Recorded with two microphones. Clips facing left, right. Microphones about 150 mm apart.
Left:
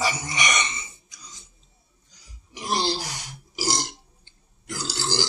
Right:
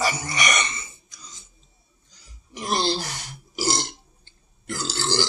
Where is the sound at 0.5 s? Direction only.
50° right (ahead or behind).